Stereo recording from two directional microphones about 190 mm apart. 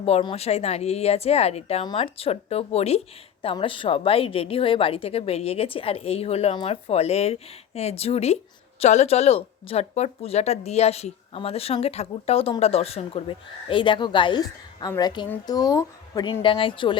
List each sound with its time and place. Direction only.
0.0 s a woman's voice: 30° left (ahead or behind)